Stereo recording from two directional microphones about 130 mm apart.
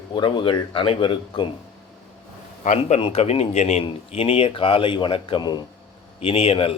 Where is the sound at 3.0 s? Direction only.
50° left (ahead or behind).